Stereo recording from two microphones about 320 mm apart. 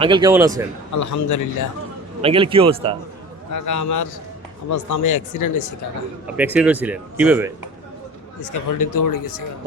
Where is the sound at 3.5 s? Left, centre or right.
Left.